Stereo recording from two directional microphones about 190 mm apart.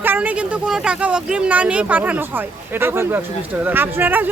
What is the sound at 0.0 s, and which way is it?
Speech, 10° right (ahead or behind).